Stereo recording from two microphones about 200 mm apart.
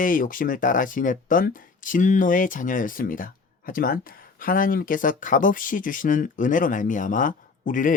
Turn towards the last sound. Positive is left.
turn(degrees=40)  # may be behind; listen again after turning